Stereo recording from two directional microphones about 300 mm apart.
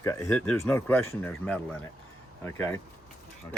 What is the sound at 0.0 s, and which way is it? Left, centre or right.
Speech, centre.